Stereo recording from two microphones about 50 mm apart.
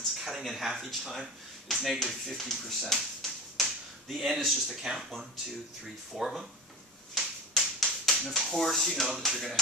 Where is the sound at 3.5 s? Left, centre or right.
Centre.